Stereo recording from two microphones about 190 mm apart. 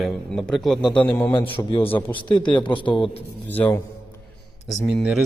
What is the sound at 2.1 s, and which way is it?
Speech, 25° left (ahead or behind).